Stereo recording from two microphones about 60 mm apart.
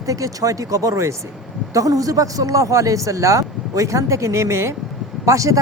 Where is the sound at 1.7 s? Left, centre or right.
Right.